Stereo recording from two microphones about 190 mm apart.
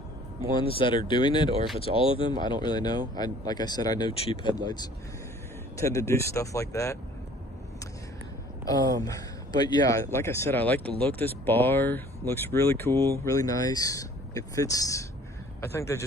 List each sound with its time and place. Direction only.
0.5 s speech: 25° left (ahead or behind)
9.0 s speech: 20° left (ahead or behind)